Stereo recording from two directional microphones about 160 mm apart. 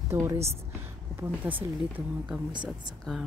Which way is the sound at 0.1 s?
15° right (ahead or behind).